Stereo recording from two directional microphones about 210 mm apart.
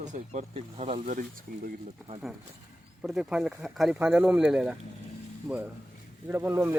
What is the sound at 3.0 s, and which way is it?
Speech, centre (ahead or behind).